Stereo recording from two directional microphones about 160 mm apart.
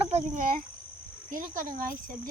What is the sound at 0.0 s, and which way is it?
Cricket, 45° right (ahead or behind).